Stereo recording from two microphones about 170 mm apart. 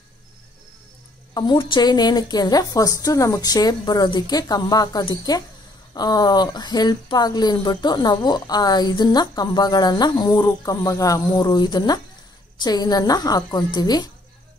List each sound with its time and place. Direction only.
1.3 s speech: 25° left (ahead or behind)